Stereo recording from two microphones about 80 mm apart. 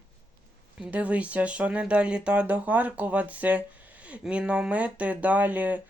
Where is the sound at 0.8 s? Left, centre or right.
Centre.